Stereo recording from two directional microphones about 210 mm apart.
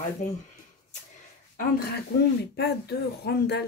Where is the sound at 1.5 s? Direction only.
45° left (ahead or behind).